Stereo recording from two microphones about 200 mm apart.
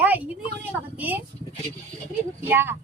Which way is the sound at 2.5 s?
10° right (ahead or behind).